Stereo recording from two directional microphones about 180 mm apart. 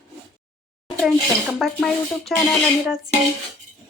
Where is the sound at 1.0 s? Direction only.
Centre (ahead or behind).